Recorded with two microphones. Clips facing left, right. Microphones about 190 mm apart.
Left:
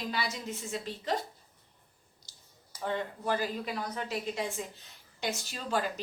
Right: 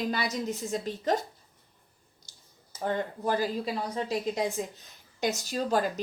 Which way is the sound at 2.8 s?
40° right (ahead or behind).